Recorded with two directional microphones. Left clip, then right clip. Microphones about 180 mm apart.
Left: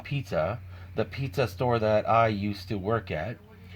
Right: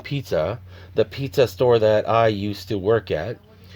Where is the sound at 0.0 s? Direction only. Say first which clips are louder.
Right 6 dB; 55° right (ahead or behind).